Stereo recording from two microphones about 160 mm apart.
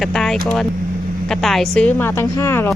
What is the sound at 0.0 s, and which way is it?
A woman's voice, centre (ahead or behind).